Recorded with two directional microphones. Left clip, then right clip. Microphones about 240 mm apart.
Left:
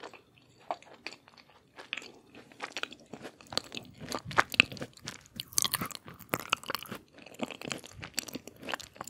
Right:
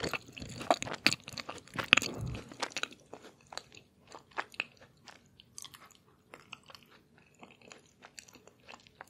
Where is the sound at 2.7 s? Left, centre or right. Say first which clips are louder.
Even; centre.